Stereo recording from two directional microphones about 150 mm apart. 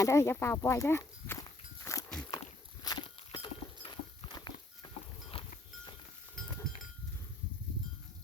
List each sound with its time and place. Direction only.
0.0 s speech: 20° left (ahead or behind)
1.8 s a sound: 20° left (ahead or behind)
5.3 s livestock: 40° left (ahead or behind)
6.6 s goat: centre (ahead or behind)